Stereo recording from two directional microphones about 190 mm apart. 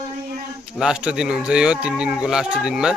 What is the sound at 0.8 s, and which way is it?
Speech, 5° right (ahead or behind).